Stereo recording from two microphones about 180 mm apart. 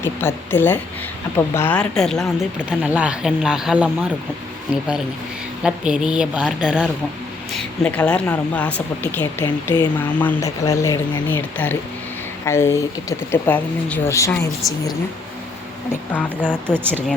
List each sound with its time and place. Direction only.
0.0 s a woman's voice: 10° left (ahead or behind); by 6.9 s 5° right (ahead or behind)
7.5 s a woman's voice: 5° left (ahead or behind)
15.9 s a woman's voice: 10° left (ahead or behind)